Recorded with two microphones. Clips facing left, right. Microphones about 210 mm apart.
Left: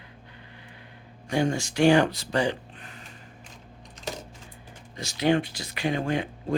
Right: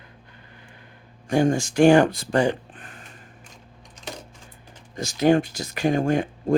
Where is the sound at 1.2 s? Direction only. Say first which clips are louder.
Right 5 dB; 45° right (ahead or behind).